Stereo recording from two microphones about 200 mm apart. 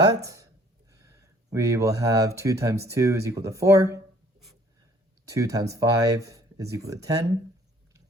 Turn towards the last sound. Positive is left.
turn(degrees=-15)  # may be behind; listen again after turning